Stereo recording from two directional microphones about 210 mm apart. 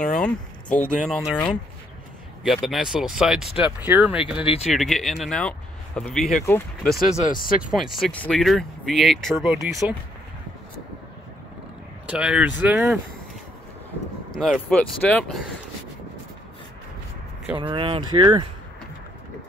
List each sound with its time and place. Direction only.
0.0 s speech: 5° left (ahead or behind)
4.5 s speech: 30° left (ahead or behind)
4.7 s speech: centre (ahead or behind)
12.1 s speech: 5° right (ahead or behind)
14.3 s speech: centre (ahead or behind)
17.6 s speech: 25° right (ahead or behind)